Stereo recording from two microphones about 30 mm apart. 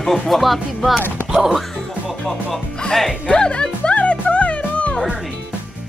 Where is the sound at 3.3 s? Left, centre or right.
Left.